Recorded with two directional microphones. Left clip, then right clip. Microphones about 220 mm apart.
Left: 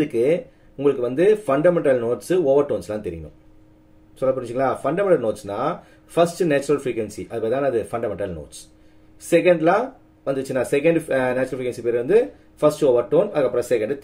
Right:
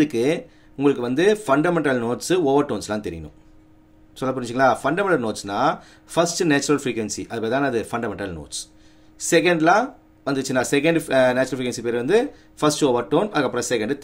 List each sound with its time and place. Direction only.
0.0 s speech: 45° right (ahead or behind)
4.2 s speech: 45° right (ahead or behind)
9.3 s speech: 45° right (ahead or behind)